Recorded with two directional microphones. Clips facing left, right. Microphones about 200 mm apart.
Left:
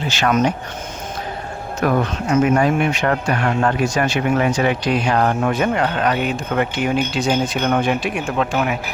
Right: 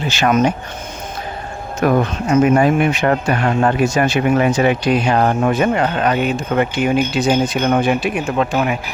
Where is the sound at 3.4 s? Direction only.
15° right (ahead or behind).